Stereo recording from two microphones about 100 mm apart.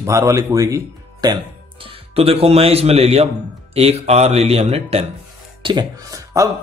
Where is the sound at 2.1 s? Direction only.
80° right.